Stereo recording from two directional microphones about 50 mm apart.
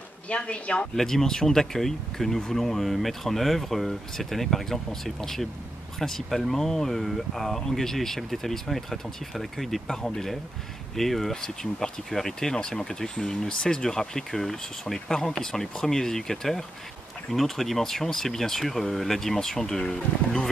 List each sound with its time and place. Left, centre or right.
0.3 s speech: left
0.9 s speech: centre